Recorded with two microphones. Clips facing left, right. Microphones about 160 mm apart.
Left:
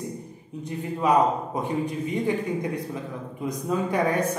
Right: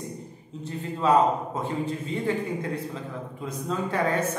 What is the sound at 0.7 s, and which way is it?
A man's voice, 15° left (ahead or behind).